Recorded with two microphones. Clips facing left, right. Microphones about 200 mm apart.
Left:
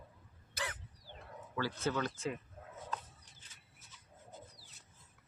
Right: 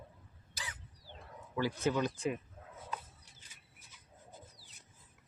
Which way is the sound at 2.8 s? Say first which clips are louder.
Even; 10° right (ahead or behind).